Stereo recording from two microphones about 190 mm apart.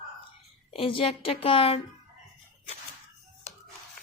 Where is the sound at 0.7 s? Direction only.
30° left (ahead or behind).